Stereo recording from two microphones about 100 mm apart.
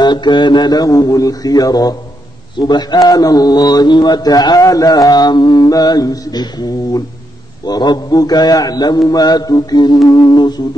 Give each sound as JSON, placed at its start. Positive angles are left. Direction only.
{"t": 0.0, "sound": "speech", "side_deg": 45}